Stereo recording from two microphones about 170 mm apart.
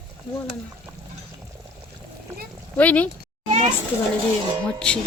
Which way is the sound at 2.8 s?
10° left (ahead or behind).